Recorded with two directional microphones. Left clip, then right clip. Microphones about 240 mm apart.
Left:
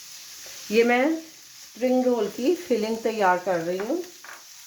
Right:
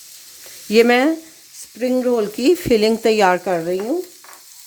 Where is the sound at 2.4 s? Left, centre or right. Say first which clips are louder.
Right 9 dB; right.